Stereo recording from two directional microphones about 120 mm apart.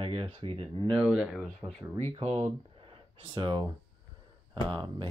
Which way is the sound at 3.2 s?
40° right (ahead or behind).